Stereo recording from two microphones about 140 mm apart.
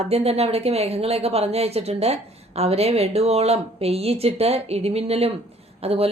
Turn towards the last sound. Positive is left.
turn(degrees=-45)  # may be behind; listen again after turning